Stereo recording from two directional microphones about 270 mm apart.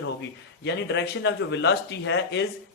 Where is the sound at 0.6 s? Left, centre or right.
Left.